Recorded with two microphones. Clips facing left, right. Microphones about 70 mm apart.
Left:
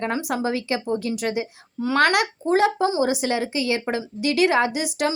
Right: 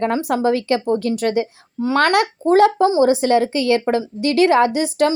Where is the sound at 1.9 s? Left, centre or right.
Right.